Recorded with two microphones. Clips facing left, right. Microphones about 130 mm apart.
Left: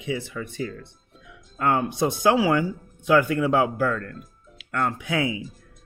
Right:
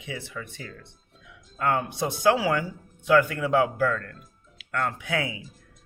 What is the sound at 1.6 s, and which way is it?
Speech, 20° left (ahead or behind).